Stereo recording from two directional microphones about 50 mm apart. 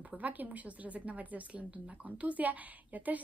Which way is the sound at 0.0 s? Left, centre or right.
Right.